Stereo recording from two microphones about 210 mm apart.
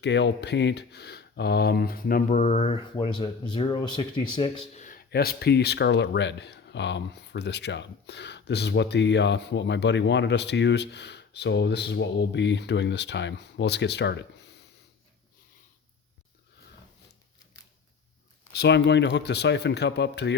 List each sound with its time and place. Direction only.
0.0 s speech: 55° left (ahead or behind); by 2.7 s 30° left (ahead or behind)
2.9 s speech: 20° left (ahead or behind)
4.7 s speech: 35° left (ahead or behind); by 14.6 s 55° left (ahead or behind)
18.5 s speech: 50° left (ahead or behind)